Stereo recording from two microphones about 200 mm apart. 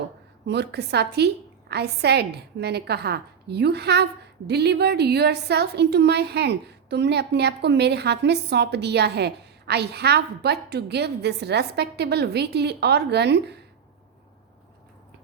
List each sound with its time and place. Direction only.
0.4 s a woman's voice: 55° right (ahead or behind)